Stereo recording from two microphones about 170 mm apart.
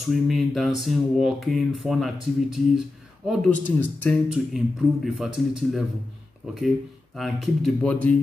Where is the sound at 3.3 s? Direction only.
Centre (ahead or behind).